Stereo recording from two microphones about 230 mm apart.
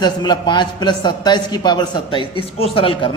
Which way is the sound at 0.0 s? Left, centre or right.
Centre.